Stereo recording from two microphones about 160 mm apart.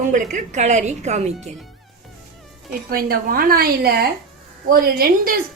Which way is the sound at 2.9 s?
70° right (ahead or behind).